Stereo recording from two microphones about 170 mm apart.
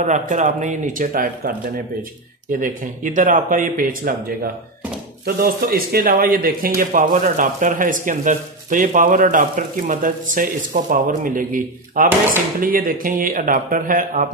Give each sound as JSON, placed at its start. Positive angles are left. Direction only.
{"t": 0.0, "sound": "speech", "side_deg": -45}
{"t": 2.5, "sound": "speech", "side_deg": -50}
{"t": 5.2, "sound": "speech", "side_deg": -60}